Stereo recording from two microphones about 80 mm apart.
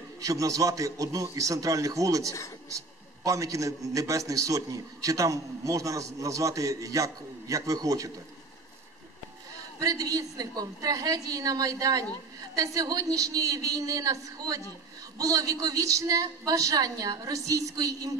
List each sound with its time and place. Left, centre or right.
0.2 s a man's voice: right
9.8 s a man's voice: right